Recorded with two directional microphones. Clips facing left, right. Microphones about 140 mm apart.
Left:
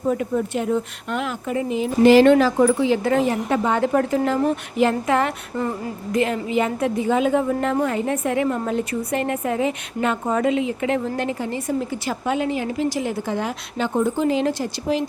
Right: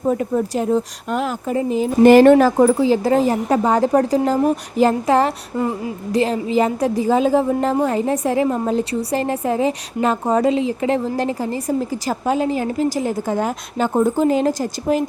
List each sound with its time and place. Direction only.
0.1 s a woman's voice: 35° right (ahead or behind)
5.5 s speech: 15° right (ahead or behind)
6.1 s a woman's voice: 30° right (ahead or behind)